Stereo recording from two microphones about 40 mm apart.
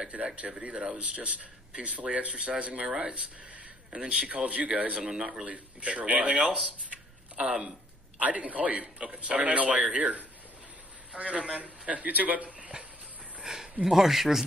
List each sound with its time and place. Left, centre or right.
0.1 s speech: right
2.9 s speech: centre
4.2 s speech: right
8.2 s speech: right
13.4 s a sound: centre
13.8 s speech: centre